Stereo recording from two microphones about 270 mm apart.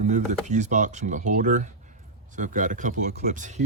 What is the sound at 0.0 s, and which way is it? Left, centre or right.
Speech, right.